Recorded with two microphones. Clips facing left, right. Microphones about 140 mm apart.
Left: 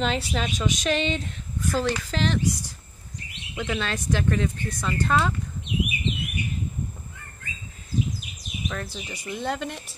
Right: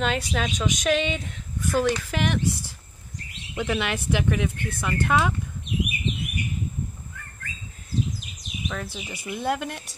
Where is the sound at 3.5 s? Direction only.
10° right (ahead or behind).